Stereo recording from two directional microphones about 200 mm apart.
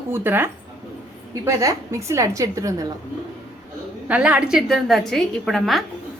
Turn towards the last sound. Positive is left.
turn(degrees=0)  # may be behind; listen again after turning